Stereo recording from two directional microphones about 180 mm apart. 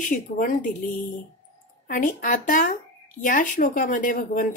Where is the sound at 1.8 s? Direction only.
50° left (ahead or behind).